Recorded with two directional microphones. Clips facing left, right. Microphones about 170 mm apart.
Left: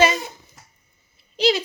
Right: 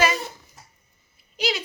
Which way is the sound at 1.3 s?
30° left (ahead or behind).